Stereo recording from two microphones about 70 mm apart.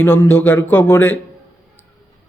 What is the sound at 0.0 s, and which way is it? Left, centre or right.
A man's voice, left.